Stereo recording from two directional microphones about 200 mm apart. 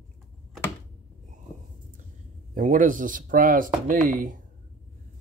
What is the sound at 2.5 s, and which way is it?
Speech, 40° right (ahead or behind).